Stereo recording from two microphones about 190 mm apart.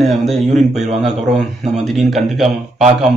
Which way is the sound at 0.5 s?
35° right (ahead or behind).